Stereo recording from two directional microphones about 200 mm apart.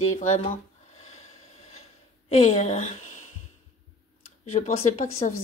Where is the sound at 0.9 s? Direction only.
35° left (ahead or behind).